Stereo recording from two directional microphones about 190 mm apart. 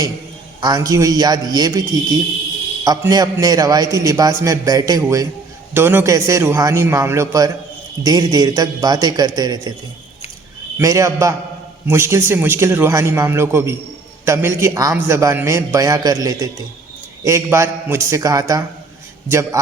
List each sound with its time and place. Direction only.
0.6 s a man's voice: 20° right (ahead or behind)
10.8 s a man's voice: 15° right (ahead or behind)